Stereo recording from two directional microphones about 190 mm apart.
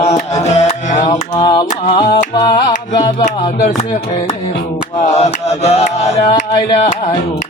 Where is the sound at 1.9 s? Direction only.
25° left (ahead or behind).